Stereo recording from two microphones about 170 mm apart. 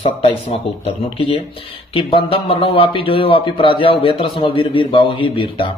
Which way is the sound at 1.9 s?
30° left (ahead or behind).